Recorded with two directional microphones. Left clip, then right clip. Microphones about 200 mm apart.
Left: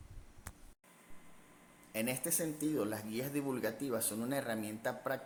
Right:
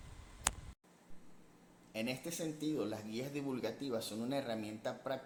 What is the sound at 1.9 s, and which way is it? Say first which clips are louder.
Speech: left 3 dB; 35° left (ahead or behind).